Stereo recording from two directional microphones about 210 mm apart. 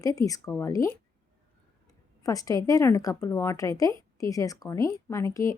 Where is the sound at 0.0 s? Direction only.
15° left (ahead or behind).